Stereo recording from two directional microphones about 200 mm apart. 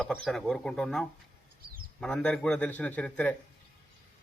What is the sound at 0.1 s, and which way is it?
A man's voice, centre (ahead or behind).